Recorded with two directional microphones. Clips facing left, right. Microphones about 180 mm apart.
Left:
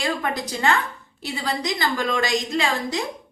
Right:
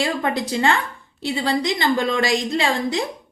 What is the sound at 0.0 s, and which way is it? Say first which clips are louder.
A woman's voice: right 3 dB; 25° right (ahead or behind).